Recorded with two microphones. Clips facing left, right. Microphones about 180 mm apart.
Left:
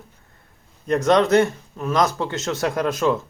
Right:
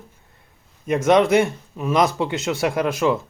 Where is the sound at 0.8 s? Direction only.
10° right (ahead or behind).